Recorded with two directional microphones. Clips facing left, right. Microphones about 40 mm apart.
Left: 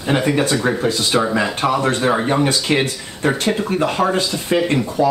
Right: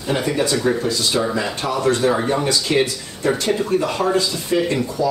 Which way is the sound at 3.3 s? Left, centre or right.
Centre.